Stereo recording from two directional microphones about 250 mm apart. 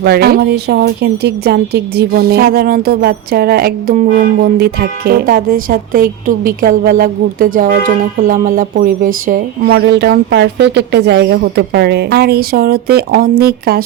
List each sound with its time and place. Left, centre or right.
0.0 s a woman's voice: right